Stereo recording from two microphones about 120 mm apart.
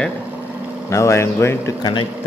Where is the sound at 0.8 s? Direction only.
25° left (ahead or behind).